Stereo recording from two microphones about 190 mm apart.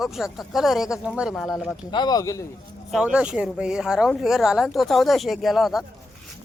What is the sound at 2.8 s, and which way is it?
Speech, 5° right (ahead or behind).